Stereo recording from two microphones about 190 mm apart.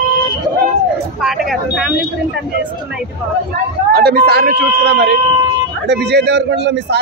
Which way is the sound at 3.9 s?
55° right (ahead or behind).